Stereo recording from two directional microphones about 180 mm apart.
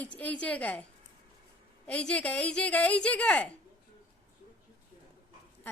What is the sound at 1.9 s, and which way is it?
A woman's voice, 5° left (ahead or behind).